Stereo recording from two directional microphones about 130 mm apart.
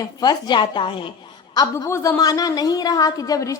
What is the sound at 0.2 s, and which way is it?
Speech, 35° left (ahead or behind).